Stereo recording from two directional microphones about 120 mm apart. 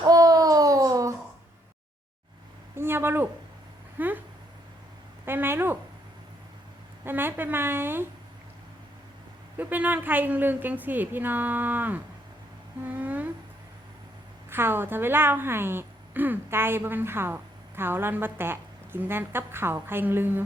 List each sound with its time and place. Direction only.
0.0 s a sound: 30° right (ahead or behind)
2.7 s a sound: 20° right (ahead or behind)
3.9 s speech: 15° right (ahead or behind)
5.2 s a woman's voice: 20° right (ahead or behind)
7.0 s a woman's voice: 15° right (ahead or behind)
9.6 s a woman's voice: 15° right (ahead or behind)
14.5 s a woman's voice: 20° right (ahead or behind)